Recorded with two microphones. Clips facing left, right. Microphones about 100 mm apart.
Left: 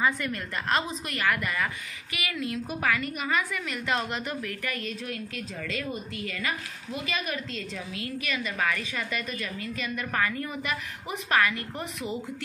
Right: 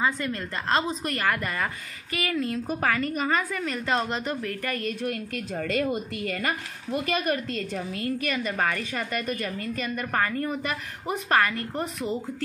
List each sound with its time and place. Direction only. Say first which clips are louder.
0.0 s a woman's voice: right 1 dB; 30° right (ahead or behind)